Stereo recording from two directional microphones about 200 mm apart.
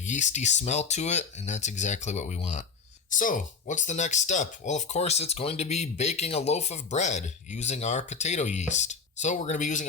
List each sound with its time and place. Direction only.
0.0 s speech: 35° left (ahead or behind)